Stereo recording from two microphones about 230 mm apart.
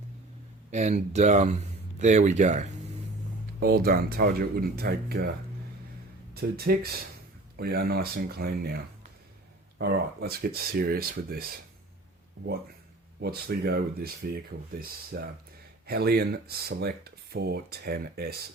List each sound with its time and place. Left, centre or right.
0.7 s speech: right
6.3 s speech: right
13.2 s speech: right